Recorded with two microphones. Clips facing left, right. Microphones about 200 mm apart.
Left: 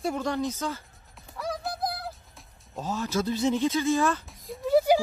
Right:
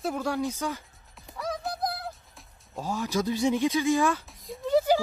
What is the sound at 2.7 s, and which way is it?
Speech, 15° right (ahead or behind).